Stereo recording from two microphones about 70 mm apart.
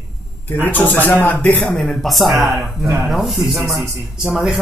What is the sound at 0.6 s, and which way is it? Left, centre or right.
A man's voice, left.